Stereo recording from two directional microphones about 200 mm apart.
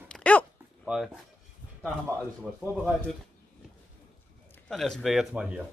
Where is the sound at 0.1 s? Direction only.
5° left (ahead or behind).